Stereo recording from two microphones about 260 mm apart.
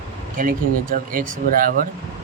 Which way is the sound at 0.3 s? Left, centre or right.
Right.